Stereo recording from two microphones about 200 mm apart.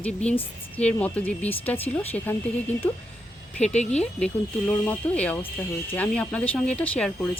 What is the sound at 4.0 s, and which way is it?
Speech, 5° left (ahead or behind).